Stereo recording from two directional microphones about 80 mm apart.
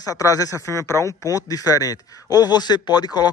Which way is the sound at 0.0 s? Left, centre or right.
Left.